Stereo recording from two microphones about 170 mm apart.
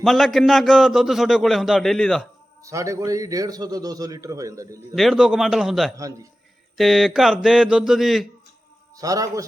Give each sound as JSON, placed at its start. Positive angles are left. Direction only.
{"t": 0.0, "sound": "a man's voice", "side_deg": 0}
{"t": 2.6, "sound": "a man's voice", "side_deg": -20}
{"t": 4.9, "sound": "a man's voice", "side_deg": 0}
{"t": 9.0, "sound": "a man's voice", "side_deg": -20}